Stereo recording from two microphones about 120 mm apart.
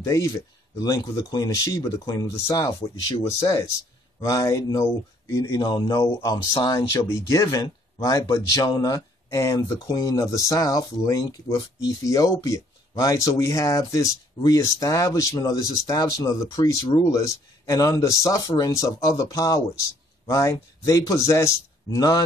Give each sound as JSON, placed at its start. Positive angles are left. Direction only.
{"t": 0.0, "sound": "speech", "side_deg": 25}